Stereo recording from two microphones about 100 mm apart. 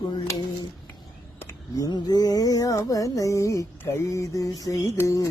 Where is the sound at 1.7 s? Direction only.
40° left (ahead or behind).